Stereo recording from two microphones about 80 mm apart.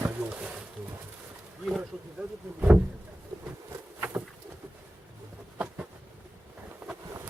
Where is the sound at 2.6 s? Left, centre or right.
Centre.